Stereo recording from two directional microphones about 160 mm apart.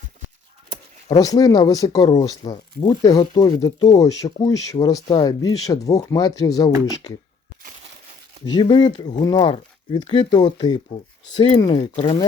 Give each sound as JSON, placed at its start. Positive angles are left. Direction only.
{"t": 1.2, "sound": "speech", "side_deg": 20}
{"t": 8.4, "sound": "speech", "side_deg": 30}